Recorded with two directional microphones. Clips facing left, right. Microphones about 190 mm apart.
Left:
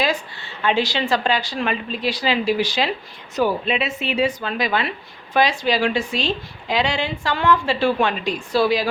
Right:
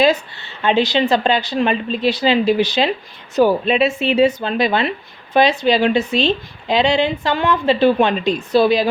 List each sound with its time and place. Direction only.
0.6 s speech: 20° right (ahead or behind)
3.3 s speech: 35° right (ahead or behind)